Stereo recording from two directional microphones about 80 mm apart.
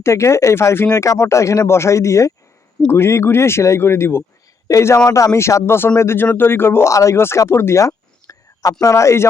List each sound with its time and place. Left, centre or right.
0.0 s speech: left